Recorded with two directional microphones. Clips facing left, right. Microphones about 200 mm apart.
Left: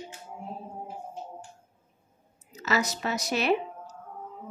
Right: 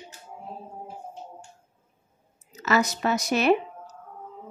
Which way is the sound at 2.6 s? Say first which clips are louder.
Right 4 dB; 55° right (ahead or behind).